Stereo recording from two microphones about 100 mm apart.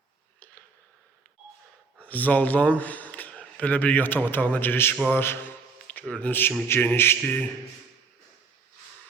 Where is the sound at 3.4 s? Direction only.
15° left (ahead or behind).